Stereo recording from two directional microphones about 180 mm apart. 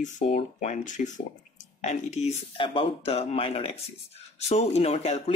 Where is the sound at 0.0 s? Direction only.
40° left (ahead or behind).